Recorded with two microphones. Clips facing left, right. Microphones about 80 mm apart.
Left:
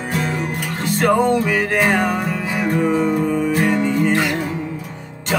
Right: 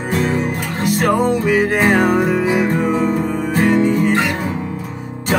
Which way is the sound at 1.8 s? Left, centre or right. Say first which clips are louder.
Right 4 dB; right.